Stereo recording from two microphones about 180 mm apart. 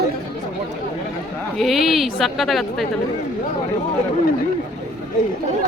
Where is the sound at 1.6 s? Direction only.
Centre (ahead or behind).